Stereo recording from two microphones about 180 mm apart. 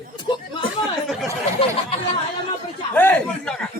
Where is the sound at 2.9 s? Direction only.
10° left (ahead or behind).